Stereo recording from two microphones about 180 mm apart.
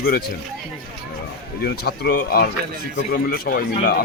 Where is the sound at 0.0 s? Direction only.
60° left (ahead or behind).